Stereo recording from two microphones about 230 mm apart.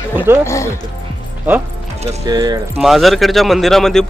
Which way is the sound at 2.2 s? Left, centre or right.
Centre.